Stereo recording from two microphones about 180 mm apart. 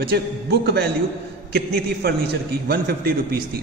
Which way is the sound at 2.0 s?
60° right (ahead or behind).